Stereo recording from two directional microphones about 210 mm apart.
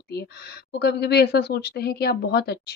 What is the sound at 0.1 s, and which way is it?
Speech, 50° left (ahead or behind).